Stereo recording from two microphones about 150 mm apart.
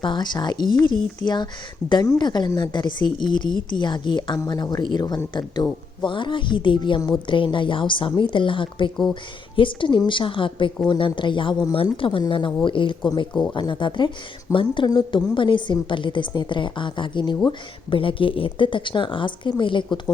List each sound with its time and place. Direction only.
0.0 s a woman's voice: 30° left (ahead or behind)